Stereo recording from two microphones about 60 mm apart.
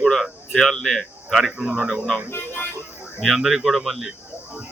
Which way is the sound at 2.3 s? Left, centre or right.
Left.